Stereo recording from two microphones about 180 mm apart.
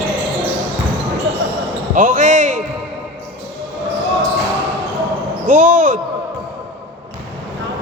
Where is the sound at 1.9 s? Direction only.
45° right (ahead or behind).